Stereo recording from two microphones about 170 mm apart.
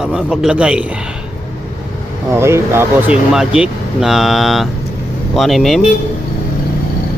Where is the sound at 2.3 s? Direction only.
15° right (ahead or behind).